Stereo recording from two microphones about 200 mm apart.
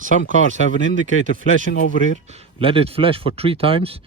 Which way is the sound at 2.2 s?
30° right (ahead or behind).